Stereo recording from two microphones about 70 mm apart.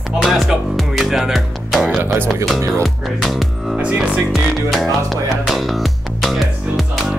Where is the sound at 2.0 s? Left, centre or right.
Right.